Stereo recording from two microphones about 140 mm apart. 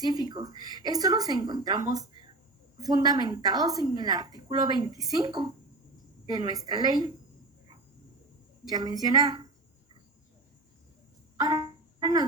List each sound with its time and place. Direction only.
0.0 s a woman's voice: 30° right (ahead or behind)
8.7 s a woman's voice: 25° right (ahead or behind)
11.3 s music: 30° right (ahead or behind)